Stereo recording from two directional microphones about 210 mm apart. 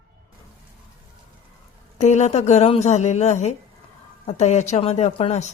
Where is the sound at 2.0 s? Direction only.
35° left (ahead or behind).